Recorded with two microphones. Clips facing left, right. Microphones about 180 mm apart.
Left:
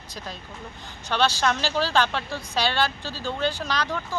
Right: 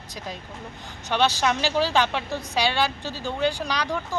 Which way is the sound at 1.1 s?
15° right (ahead or behind).